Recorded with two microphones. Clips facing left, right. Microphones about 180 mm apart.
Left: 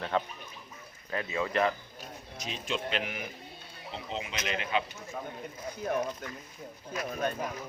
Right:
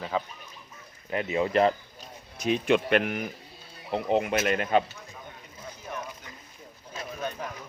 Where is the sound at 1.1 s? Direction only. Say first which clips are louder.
Right 6 dB; 20° right (ahead or behind).